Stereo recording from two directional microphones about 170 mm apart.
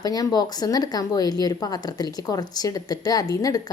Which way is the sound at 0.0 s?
20° left (ahead or behind).